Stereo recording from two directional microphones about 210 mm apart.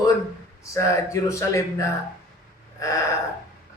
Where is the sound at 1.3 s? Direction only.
15° left (ahead or behind).